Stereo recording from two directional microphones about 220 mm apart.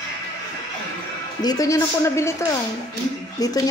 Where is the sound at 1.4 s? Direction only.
15° left (ahead or behind).